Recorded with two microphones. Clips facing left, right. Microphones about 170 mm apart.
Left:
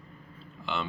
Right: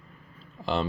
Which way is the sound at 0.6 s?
40° right (ahead or behind).